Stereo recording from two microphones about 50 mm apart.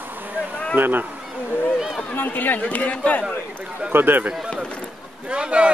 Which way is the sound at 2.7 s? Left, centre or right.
Left.